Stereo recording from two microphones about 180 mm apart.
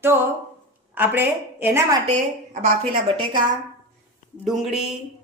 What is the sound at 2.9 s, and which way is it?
Speech, 25° right (ahead or behind).